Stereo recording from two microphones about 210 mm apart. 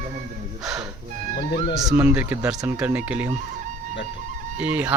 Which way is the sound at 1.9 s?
10° right (ahead or behind).